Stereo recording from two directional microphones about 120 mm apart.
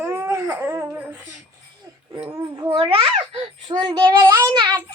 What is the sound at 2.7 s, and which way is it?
A child's voice, 50° right (ahead or behind).